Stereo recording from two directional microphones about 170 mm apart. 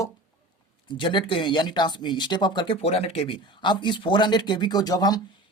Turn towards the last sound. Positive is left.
turn(degrees=25)  # may be behind; listen again after turning